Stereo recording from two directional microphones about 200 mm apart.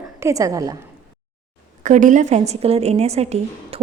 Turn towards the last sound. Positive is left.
turn(degrees=-30)  # may be behind; listen again after turning